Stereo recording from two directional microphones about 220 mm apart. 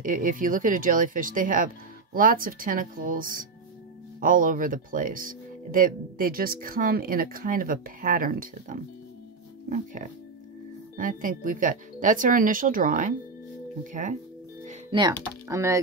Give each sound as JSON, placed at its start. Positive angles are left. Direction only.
{"t": 0.0, "sound": "speech", "side_deg": -40}
{"t": 11.0, "sound": "speech", "side_deg": -40}
{"t": 14.7, "sound": "music", "side_deg": -20}
{"t": 15.4, "sound": "speech", "side_deg": -15}